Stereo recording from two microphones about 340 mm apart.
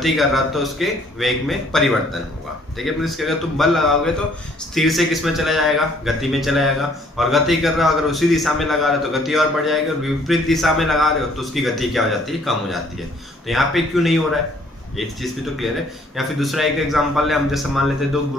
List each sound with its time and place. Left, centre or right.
0.0 s a man's voice: centre